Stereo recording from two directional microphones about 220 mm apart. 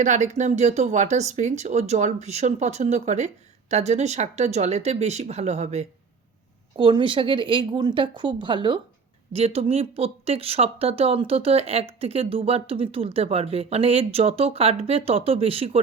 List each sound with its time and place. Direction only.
0.0 s speech: 35° right (ahead or behind)